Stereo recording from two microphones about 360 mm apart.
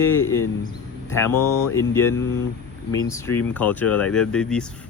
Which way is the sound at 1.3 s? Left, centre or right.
Left.